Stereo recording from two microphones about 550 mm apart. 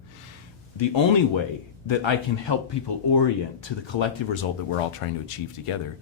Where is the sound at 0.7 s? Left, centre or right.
Left.